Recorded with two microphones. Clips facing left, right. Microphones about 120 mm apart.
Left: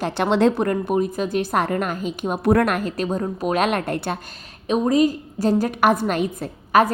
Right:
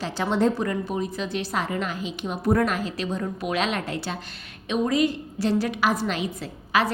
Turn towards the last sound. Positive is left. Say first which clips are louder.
# left 6 dB
turn(degrees=50)  # may be behind; listen again after turning